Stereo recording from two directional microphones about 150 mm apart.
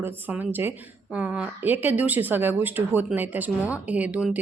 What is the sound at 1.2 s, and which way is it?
Speech, 10° right (ahead or behind).